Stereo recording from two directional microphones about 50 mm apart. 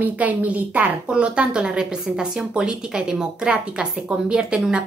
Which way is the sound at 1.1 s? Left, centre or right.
Right.